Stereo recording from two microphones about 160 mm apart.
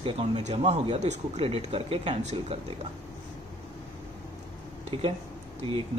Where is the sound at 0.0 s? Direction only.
40° right (ahead or behind).